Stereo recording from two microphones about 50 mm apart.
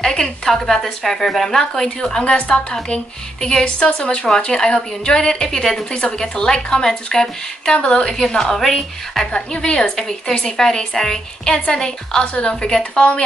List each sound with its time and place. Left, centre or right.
0.0 s a woman's voice: centre
9.3 s a woman's voice: centre